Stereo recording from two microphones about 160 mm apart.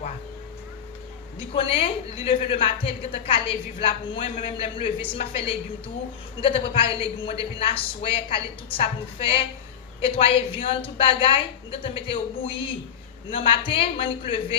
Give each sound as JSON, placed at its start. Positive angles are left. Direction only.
{"t": 1.5, "sound": "a woman's voice", "side_deg": 35}
{"t": 13.3, "sound": "a woman's voice", "side_deg": 35}